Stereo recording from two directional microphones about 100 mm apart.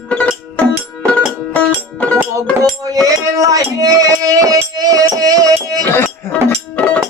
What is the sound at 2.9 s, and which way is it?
Speech, 35° right (ahead or behind).